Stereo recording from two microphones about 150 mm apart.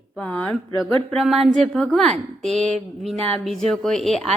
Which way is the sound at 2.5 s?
50° right (ahead or behind).